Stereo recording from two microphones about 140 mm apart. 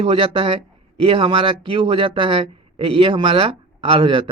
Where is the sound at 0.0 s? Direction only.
40° right (ahead or behind).